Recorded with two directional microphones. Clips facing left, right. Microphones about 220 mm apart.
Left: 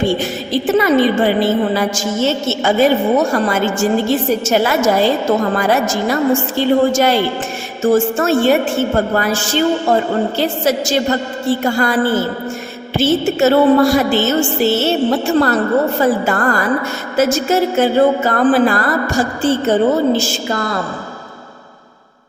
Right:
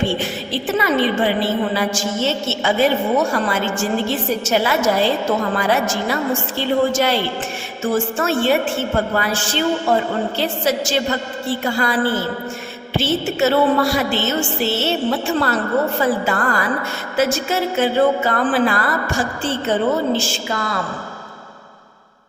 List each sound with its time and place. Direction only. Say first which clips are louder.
0.0 s a woman's voice: left 4 dB; 40° left (ahead or behind)